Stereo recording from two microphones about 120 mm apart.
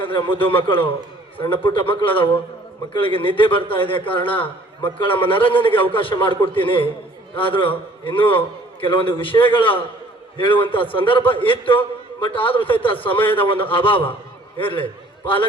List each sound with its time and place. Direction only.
0.0 s a man's voice: 45° left (ahead or behind)